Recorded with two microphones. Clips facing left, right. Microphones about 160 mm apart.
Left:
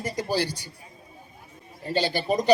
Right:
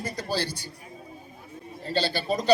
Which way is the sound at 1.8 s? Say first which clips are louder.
Left 2 dB; 15° left (ahead or behind).